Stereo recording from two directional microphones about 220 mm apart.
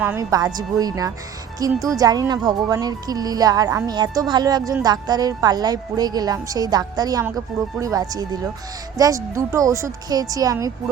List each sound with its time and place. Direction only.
0.0 s speech: 10° right (ahead or behind)